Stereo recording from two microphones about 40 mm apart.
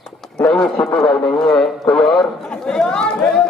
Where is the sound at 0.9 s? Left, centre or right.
Centre.